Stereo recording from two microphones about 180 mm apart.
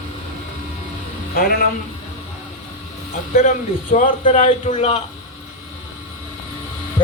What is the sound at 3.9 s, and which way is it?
A man's voice, 50° left (ahead or behind).